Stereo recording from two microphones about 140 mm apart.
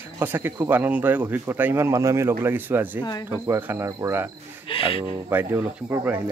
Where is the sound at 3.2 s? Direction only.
15° right (ahead or behind).